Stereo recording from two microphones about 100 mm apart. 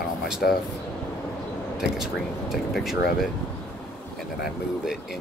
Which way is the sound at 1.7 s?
5° right (ahead or behind).